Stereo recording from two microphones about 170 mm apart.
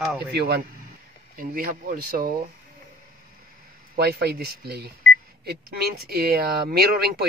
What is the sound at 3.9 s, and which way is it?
Speech, 70° right (ahead or behind).